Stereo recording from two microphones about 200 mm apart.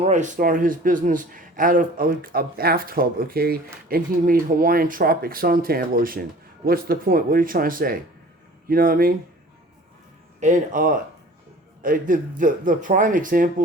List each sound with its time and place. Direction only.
0.0 s speech: 35° right (ahead or behind)
10.4 s speech: 40° right (ahead or behind)